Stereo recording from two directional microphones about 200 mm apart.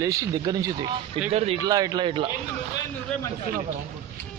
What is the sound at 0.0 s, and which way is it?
Speech, 15° right (ahead or behind).